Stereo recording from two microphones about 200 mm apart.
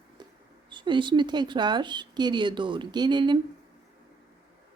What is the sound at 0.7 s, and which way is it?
Speech, 25° right (ahead or behind).